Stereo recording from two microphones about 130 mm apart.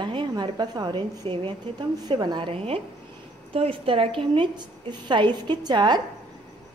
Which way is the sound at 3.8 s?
45° right (ahead or behind).